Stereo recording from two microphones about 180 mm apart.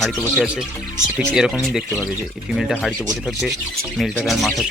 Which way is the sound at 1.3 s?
5° right (ahead or behind).